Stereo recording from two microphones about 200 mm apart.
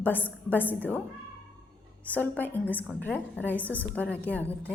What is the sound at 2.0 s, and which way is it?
A woman's voice, 10° left (ahead or behind).